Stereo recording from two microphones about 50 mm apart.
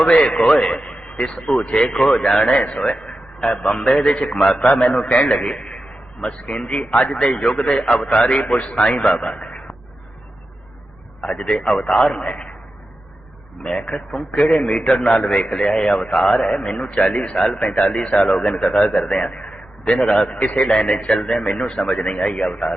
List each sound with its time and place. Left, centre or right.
0.0 s a man's voice: left
9.2 s a sound: left
11.2 s a man's voice: centre
13.6 s a man's voice: left